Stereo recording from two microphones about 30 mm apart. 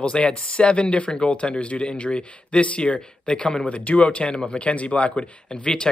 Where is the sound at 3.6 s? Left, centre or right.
Left.